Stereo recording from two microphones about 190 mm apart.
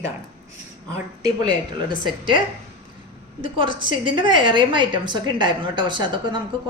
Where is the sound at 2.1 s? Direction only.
25° right (ahead or behind).